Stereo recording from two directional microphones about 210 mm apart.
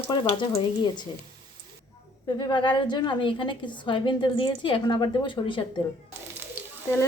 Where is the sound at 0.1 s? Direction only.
20° left (ahead or behind).